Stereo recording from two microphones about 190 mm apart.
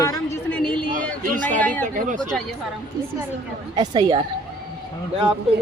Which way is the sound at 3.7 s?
20° right (ahead or behind).